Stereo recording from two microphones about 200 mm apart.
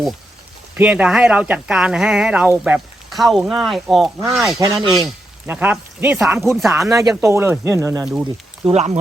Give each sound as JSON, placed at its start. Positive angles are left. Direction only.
{"t": 0.8, "sound": "speech", "side_deg": -5}
{"t": 4.6, "sound": "speech", "side_deg": -20}
{"t": 4.9, "sound": "speech", "side_deg": -5}
{"t": 7.2, "sound": "speech", "side_deg": -15}
{"t": 8.0, "sound": "speech", "side_deg": -5}
{"t": 8.6, "sound": "speech", "side_deg": -35}